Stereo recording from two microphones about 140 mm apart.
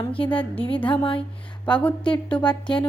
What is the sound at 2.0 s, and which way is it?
Speech, 35° left (ahead or behind).